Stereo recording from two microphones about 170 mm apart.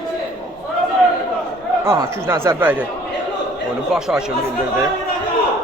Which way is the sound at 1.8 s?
15° right (ahead or behind).